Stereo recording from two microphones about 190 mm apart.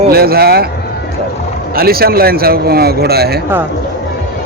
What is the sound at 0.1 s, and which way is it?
Speech, 55° right (ahead or behind).